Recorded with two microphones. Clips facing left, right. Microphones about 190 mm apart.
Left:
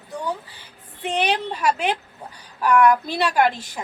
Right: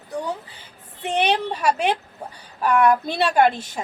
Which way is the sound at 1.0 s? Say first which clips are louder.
Right 2 dB; 20° right (ahead or behind).